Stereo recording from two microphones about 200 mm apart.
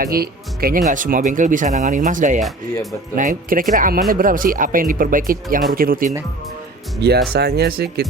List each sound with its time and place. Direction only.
0.0 s speech: 50° right (ahead or behind)